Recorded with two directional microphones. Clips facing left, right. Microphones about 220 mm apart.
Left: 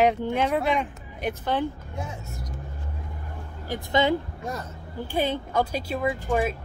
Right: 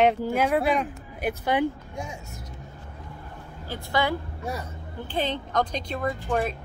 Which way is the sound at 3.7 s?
20° left (ahead or behind).